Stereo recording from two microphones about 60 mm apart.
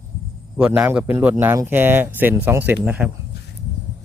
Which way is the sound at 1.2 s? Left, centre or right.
Right.